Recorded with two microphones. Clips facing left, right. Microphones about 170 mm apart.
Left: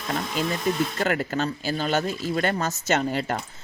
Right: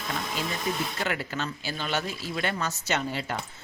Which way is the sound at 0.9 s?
45° left (ahead or behind).